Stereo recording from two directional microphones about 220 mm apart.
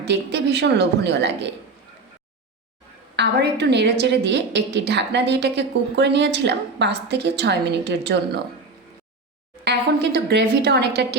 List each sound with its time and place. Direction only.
0.0 s a woman's voice: 50° right (ahead or behind)
3.2 s a woman's voice: 50° right (ahead or behind)
9.6 s a woman's voice: 45° right (ahead or behind)